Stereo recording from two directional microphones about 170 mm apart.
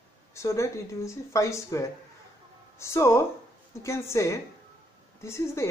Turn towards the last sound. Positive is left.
turn(degrees=15)  # may be behind; listen again after turning